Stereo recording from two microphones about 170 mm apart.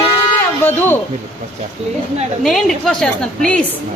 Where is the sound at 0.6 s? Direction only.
10° left (ahead or behind).